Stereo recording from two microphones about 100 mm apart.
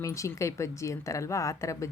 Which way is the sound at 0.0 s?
30° left (ahead or behind).